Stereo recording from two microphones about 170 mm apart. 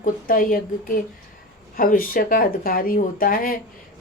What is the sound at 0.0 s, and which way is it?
Speech, 55° left (ahead or behind).